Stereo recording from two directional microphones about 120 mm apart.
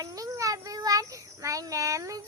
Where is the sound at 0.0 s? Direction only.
30° right (ahead or behind).